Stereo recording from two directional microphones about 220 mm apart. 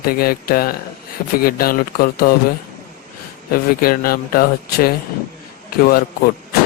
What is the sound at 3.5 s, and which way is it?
A man's voice, 40° left (ahead or behind).